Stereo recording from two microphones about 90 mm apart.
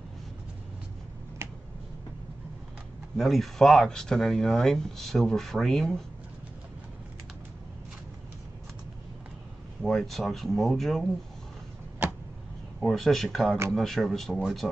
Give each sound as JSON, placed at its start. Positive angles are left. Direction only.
{"t": 1.4, "sound": "a sound", "side_deg": -30}
{"t": 3.2, "sound": "speech", "side_deg": 0}
{"t": 9.8, "sound": "speech", "side_deg": 5}
{"t": 12.8, "sound": "speech", "side_deg": 5}